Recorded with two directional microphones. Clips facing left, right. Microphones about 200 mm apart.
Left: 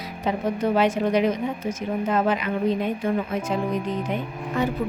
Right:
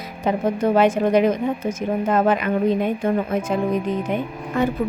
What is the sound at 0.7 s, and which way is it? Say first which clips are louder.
Speech: right 5 dB; 50° right (ahead or behind).